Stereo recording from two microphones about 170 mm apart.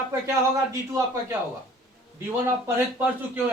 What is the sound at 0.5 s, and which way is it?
Speech, 15° right (ahead or behind).